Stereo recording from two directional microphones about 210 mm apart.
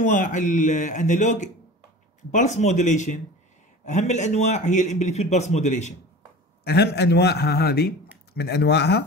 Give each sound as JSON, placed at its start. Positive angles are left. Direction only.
{"t": 0.0, "sound": "a man's voice", "side_deg": 35}
{"t": 6.6, "sound": "a man's voice", "side_deg": 50}